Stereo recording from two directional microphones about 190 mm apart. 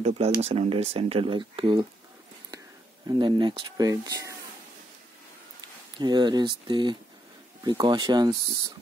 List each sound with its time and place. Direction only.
0.0 s speech: 30° right (ahead or behind)
3.1 s speech: 25° right (ahead or behind)
5.9 s speech: 25° right (ahead or behind)